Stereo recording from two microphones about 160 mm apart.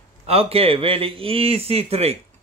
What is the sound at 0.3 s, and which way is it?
Speech, 35° right (ahead or behind).